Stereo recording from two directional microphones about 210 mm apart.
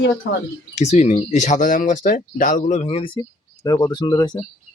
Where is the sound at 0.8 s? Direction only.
30° left (ahead or behind).